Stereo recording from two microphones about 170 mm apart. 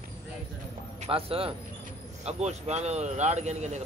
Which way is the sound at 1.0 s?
35° right (ahead or behind).